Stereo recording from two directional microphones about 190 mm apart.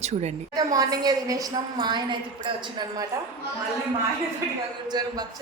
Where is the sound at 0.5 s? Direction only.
20° right (ahead or behind).